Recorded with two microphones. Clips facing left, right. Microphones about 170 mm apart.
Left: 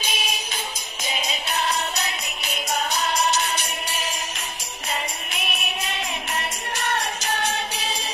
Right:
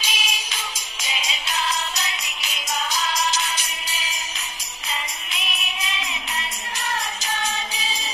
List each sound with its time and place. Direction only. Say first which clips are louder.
0.0 s music: left 2 dB; 55° left (ahead or behind)
5.3 s music: left 2 dB; 55° left (ahead or behind)